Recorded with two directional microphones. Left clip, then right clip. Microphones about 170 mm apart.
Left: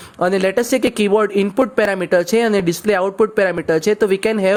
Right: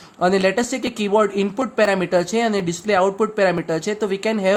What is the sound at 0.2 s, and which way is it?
Speech, 40° left (ahead or behind).